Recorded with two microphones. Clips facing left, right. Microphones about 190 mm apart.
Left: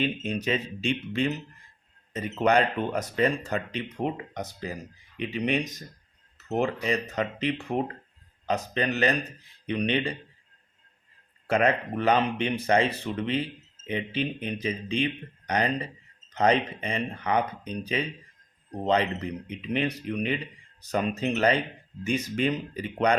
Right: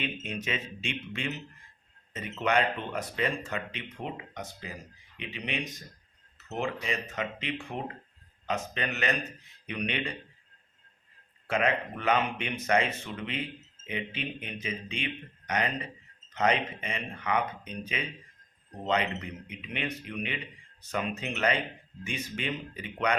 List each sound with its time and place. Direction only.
0.0 s speech: 35° left (ahead or behind)
8.4 s speech: 35° left (ahead or behind)
11.4 s speech: 40° left (ahead or behind)